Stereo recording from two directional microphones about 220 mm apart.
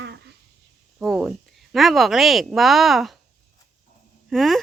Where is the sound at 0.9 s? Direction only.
5° right (ahead or behind).